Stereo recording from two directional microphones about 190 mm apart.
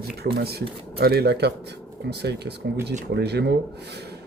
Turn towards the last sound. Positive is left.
turn(degrees=-60)  # may be behind; listen again after turning